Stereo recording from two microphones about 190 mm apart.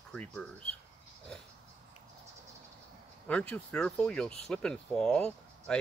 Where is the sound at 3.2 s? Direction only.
5° left (ahead or behind).